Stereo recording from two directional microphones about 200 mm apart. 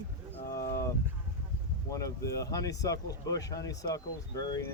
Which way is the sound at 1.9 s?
15° left (ahead or behind).